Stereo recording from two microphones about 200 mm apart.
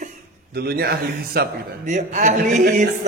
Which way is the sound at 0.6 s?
50° right (ahead or behind).